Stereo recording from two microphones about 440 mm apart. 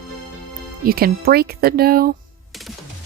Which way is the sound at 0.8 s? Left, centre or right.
Right.